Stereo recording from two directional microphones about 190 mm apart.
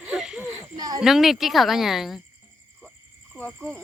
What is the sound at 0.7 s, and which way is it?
Speech, 20° right (ahead or behind).